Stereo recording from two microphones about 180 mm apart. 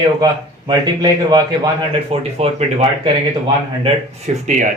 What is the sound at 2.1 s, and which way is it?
Speech, 35° right (ahead or behind).